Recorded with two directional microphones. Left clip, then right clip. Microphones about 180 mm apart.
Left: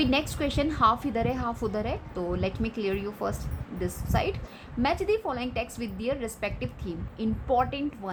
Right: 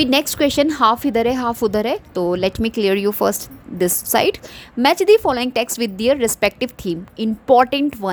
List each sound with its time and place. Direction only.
0.0 s a woman's voice: 55° right (ahead or behind)